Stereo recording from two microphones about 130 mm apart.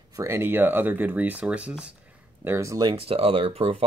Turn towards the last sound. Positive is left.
turn(degrees=-45)  # may be behind; listen again after turning